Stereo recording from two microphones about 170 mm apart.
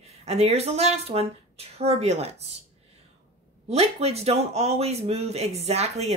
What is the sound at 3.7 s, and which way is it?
A woman's voice, 35° right (ahead or behind).